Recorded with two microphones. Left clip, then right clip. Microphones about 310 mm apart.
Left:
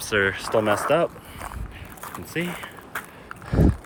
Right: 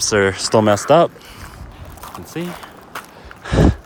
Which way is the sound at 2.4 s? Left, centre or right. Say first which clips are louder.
Right 1 dB; centre.